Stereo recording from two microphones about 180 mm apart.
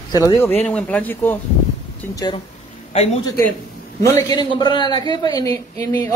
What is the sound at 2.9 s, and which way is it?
Speech, 35° left (ahead or behind).